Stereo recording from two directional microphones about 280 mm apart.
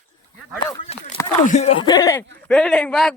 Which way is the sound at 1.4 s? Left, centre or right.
Left.